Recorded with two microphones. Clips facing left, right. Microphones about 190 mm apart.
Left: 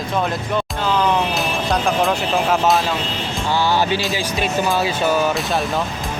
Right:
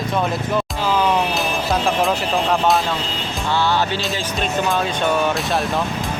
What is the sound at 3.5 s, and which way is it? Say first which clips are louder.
Music: left 1 dB; 10° left (ahead or behind).